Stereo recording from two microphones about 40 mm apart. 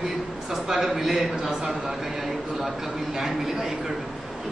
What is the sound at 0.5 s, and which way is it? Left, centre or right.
A man's voice, centre.